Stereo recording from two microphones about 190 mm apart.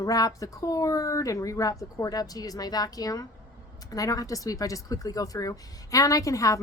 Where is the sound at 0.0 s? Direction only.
20° left (ahead or behind).